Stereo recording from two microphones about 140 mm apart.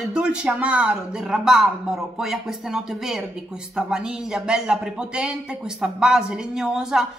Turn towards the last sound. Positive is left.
turn(degrees=-5)  # may be behind; listen again after turning